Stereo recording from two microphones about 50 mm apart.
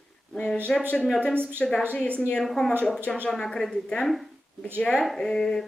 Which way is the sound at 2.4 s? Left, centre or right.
Centre.